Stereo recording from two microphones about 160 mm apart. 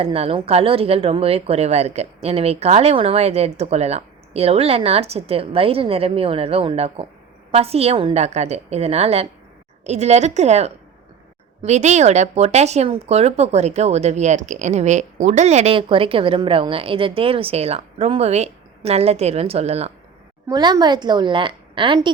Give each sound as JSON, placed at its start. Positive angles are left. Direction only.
{"t": 0.0, "sound": "a woman's voice", "side_deg": -40}
{"t": 20.5, "sound": "a woman's voice", "side_deg": -25}